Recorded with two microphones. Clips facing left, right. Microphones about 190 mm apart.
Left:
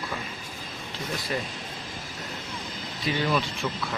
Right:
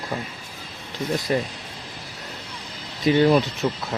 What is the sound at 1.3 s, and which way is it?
Speech, 45° right (ahead or behind).